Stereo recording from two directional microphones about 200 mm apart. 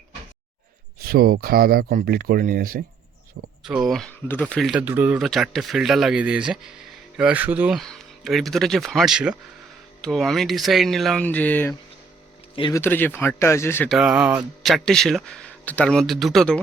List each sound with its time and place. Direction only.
0.9 s speech: 50° right (ahead or behind)
3.6 s speech: 5° right (ahead or behind)
12.5 s speech: 25° left (ahead or behind)
12.8 s speech: 10° left (ahead or behind)
13.9 s speech: 5° right (ahead or behind)